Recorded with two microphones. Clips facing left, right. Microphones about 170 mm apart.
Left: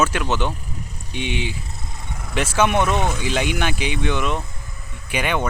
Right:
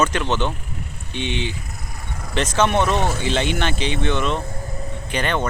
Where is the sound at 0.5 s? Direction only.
40° left (ahead or behind).